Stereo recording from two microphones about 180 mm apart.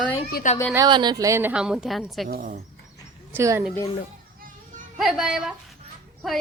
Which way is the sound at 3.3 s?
15° right (ahead or behind).